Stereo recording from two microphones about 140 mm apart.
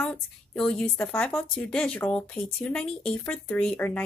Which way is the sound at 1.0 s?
15° left (ahead or behind).